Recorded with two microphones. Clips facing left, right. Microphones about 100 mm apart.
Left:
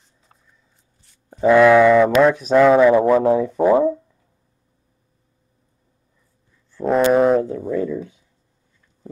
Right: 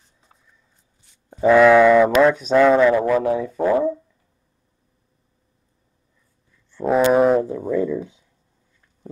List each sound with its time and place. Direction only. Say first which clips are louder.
1.0 s speech: even; centre (ahead or behind)
2.9 s speech: left 4 dB; 25° left (ahead or behind)
3.4 s speech: left 4 dB; 15° left (ahead or behind)
6.7 s a sound: left 1 dB; centre (ahead or behind)